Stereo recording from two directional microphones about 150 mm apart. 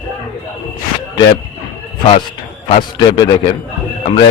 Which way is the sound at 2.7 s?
30° left (ahead or behind).